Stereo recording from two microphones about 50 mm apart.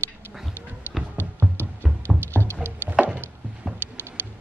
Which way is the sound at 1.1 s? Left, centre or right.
Right.